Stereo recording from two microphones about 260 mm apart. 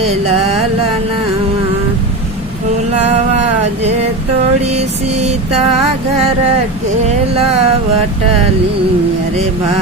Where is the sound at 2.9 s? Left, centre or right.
Right.